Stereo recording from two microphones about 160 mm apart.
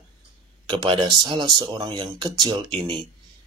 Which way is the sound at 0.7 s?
30° right (ahead or behind).